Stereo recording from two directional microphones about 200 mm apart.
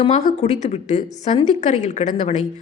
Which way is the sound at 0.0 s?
35° left (ahead or behind).